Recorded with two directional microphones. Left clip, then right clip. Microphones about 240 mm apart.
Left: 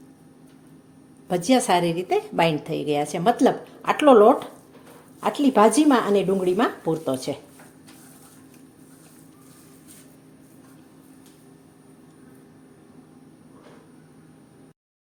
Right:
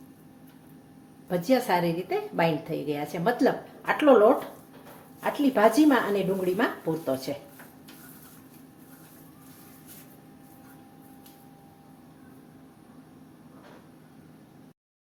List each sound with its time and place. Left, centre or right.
1.3 s a woman's voice: left
5.2 s a woman's voice: left